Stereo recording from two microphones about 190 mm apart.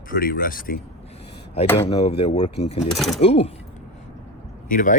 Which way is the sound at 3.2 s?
30° left (ahead or behind).